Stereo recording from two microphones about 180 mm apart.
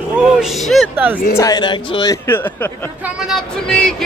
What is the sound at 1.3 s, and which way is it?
Speech, 20° left (ahead or behind).